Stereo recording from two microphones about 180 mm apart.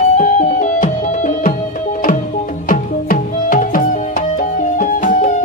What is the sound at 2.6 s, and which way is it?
Music, 50° left (ahead or behind).